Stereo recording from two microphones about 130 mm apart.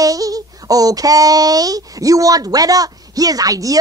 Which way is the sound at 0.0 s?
25° right (ahead or behind).